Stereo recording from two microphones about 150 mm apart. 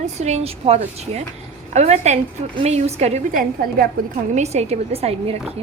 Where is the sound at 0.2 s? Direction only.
45° right (ahead or behind).